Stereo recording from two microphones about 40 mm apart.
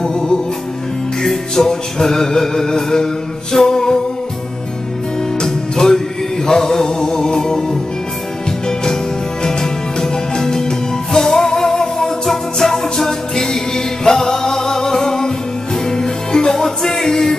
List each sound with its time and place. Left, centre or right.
0.0 s music: centre
5.4 s music: centre
9.4 s music: centre